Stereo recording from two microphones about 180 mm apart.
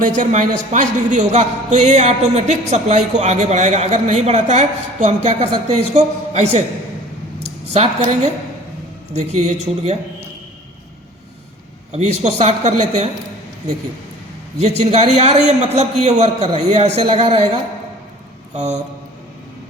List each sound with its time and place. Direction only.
0.2 s speech: 40° right (ahead or behind)
7.7 s speech: 35° right (ahead or behind)
9.1 s speech: 40° right (ahead or behind)
11.9 s speech: 40° right (ahead or behind)
14.6 s speech: 35° right (ahead or behind)
18.5 s speech: 40° right (ahead or behind)